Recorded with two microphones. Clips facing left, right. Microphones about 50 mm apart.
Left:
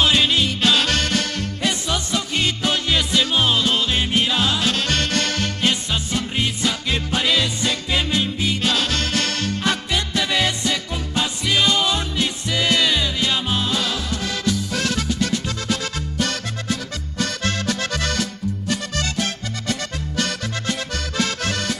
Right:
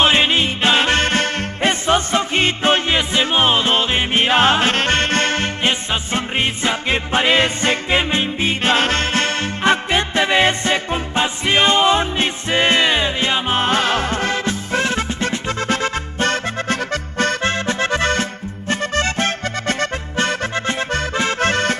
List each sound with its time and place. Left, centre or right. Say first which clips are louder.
0.0 s music: right 3 dB; right